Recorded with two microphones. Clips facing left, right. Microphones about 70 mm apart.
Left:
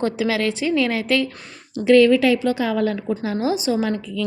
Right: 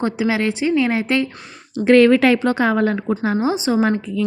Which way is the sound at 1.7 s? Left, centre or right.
Right.